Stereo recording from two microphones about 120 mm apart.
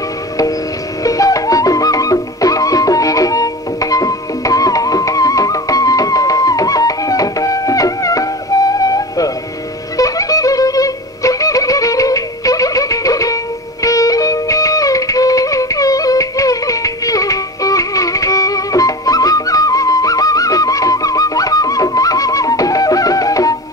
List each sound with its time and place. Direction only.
1.0 s music: 30° left (ahead or behind)
9.9 s violin: 30° left (ahead or behind)
13.8 s music: 30° left (ahead or behind)